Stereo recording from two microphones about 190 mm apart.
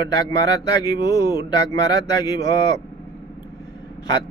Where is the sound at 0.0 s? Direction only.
20° left (ahead or behind).